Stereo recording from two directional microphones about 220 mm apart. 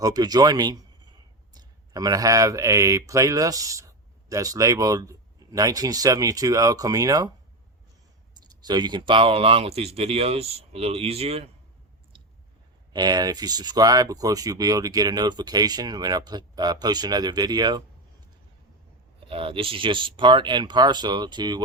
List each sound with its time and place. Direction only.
0.0 s speech: 15° right (ahead or behind)
8.4 s speech: 20° right (ahead or behind)
12.9 s speech: 20° right (ahead or behind)
19.3 s speech: 25° right (ahead or behind)